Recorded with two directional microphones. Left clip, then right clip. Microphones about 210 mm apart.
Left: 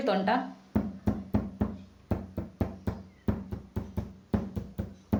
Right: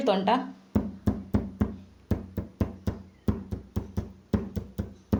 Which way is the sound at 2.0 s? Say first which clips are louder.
Right 1 dB; 20° right (ahead or behind).